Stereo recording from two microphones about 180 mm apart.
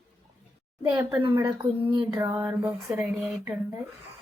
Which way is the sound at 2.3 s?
10° right (ahead or behind).